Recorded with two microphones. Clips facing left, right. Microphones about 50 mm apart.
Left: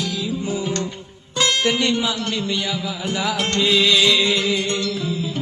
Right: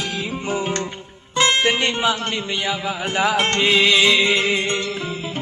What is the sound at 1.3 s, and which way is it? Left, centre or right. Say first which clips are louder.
Speech: right 2 dB; right.